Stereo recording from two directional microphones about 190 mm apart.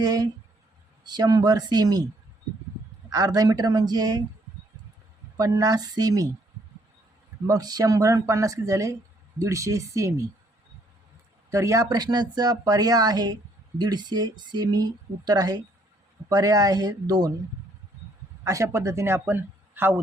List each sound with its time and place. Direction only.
0.0 s speech: 20° right (ahead or behind)
3.1 s speech: 20° right (ahead or behind)
5.4 s speech: 20° right (ahead or behind)
7.4 s a man's voice: 20° right (ahead or behind)
11.5 s speech: 15° right (ahead or behind)
18.4 s a man's voice: 15° right (ahead or behind)